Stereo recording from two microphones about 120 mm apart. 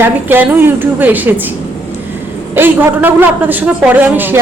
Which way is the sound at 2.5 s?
15° right (ahead or behind).